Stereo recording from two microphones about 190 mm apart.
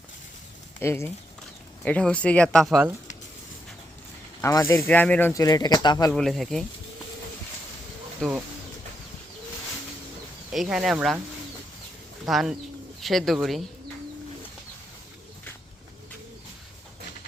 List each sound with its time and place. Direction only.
0.8 s speech: 15° left (ahead or behind)
4.4 s speech: 15° left (ahead or behind)
5.3 s speech: 20° left (ahead or behind)
6.1 s speech: centre (ahead or behind)
8.2 s speech: 5° left (ahead or behind)
10.5 s speech: centre (ahead or behind)
12.2 s speech: centre (ahead or behind)